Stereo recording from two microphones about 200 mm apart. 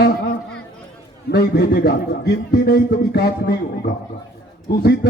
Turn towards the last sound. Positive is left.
turn(degrees=55)  # may be behind; listen again after turning